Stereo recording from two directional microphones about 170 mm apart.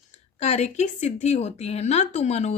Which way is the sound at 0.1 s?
40° left (ahead or behind).